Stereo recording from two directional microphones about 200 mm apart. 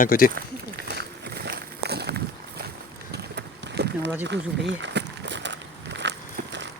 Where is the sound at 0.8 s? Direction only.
55° right (ahead or behind).